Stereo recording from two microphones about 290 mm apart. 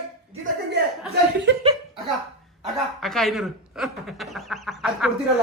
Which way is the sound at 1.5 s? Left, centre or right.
Right.